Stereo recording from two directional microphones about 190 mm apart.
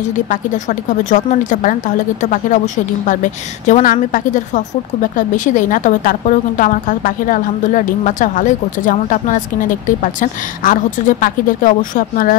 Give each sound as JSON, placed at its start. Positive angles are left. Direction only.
{"t": 0.3, "sound": "a woman's voice", "side_deg": 40}